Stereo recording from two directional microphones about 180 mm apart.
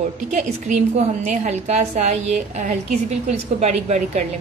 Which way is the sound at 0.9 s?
40° right (ahead or behind).